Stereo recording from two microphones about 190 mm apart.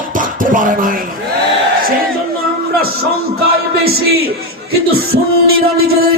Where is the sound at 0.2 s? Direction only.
45° right (ahead or behind).